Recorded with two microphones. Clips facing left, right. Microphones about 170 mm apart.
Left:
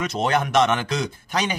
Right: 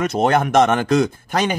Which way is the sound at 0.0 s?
55° right (ahead or behind).